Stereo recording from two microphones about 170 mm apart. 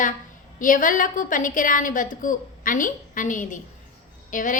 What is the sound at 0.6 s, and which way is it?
A woman's voice, 50° left (ahead or behind).